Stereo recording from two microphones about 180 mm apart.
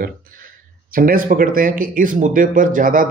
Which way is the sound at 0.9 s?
50° right (ahead or behind).